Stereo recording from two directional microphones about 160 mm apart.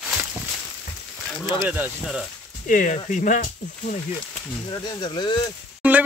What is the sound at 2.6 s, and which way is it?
Speech, 55° left (ahead or behind).